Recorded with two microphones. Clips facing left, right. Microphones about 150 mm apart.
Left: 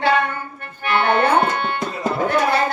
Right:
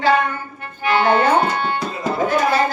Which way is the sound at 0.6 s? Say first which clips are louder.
Right 3 dB; 60° left (ahead or behind).